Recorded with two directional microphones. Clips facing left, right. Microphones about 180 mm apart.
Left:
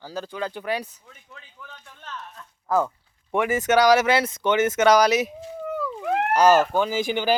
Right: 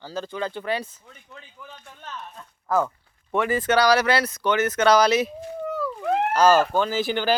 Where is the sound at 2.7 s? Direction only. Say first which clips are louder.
Even; 15° left (ahead or behind).